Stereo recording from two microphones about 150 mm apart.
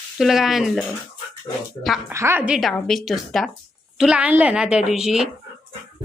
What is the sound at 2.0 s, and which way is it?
Speech, 15° right (ahead or behind).